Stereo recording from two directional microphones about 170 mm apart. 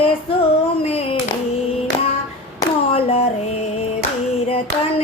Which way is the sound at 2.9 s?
35° left (ahead or behind).